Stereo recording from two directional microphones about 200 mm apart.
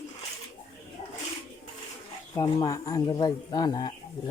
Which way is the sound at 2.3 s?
15° left (ahead or behind).